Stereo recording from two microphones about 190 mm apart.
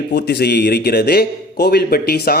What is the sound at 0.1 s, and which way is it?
A man's voice, 60° left (ahead or behind).